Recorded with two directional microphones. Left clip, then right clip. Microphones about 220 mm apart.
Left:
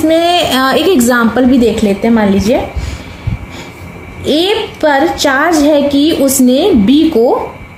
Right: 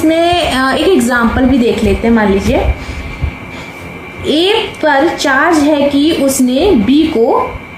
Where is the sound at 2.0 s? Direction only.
45° left (ahead or behind).